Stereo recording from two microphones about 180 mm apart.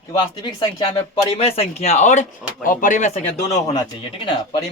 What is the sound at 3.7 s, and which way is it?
Speech, 25° left (ahead or behind).